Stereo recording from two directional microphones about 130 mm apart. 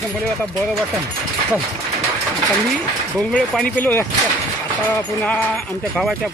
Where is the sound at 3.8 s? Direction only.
15° left (ahead or behind).